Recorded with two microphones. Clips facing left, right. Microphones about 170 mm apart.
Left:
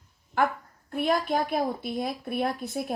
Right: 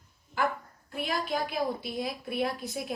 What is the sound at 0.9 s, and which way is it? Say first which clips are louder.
Speech: left 6 dB; 45° left (ahead or behind).